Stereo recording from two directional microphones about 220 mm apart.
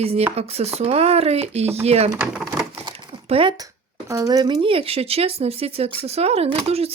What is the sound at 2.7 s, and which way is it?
Crumpling, 25° right (ahead or behind).